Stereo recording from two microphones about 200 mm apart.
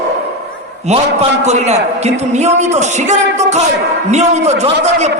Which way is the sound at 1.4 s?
35° right (ahead or behind).